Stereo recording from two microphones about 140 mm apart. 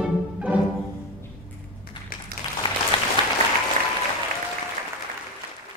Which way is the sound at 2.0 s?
35° left (ahead or behind).